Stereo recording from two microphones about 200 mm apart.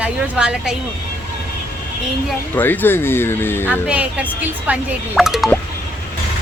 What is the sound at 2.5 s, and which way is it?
Speech, 10° left (ahead or behind).